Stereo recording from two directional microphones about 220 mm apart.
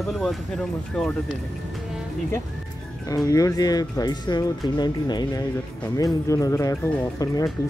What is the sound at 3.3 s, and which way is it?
Speech, 15° left (ahead or behind).